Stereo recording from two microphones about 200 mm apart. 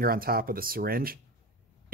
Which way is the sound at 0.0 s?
45° right (ahead or behind).